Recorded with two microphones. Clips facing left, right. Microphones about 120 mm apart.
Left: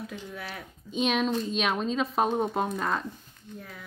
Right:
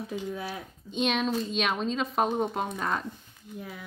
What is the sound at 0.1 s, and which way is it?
Speech, 15° right (ahead or behind).